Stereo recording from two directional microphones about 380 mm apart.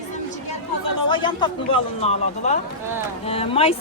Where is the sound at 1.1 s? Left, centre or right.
Centre.